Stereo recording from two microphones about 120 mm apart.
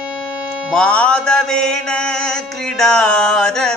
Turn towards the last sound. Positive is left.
turn(degrees=5)  # may be behind; listen again after turning